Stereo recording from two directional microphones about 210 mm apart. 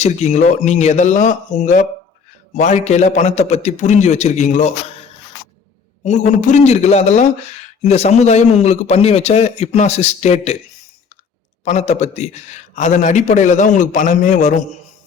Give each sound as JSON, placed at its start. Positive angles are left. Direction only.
{"t": 0.0, "sound": "a man's voice", "side_deg": 35}
{"t": 6.1, "sound": "a man's voice", "side_deg": 35}
{"t": 11.6, "sound": "a man's voice", "side_deg": 30}